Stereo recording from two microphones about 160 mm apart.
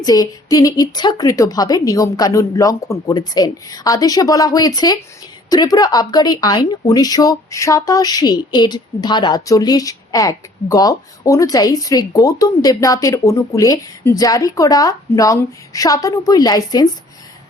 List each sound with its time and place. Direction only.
0.0 s speech: 25° left (ahead or behind)